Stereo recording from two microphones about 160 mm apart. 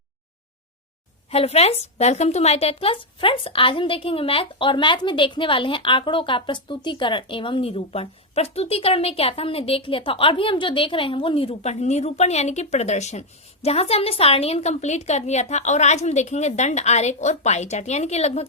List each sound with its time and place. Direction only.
1.3 s a woman's voice: 40° left (ahead or behind)